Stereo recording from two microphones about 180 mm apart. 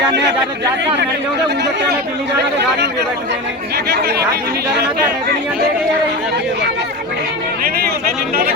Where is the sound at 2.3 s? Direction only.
70° right (ahead or behind).